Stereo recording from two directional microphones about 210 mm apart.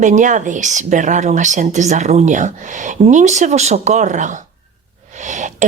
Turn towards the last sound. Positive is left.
turn(degrees=-35)  # may be behind; listen again after turning